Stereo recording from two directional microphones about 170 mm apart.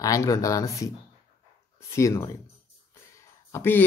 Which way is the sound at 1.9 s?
15° left (ahead or behind).